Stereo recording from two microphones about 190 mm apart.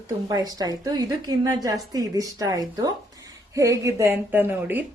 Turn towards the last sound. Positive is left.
turn(degrees=-10)  # may be behind; listen again after turning